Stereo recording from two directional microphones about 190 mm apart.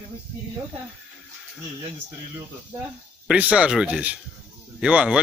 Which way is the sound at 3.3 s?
5° right (ahead or behind).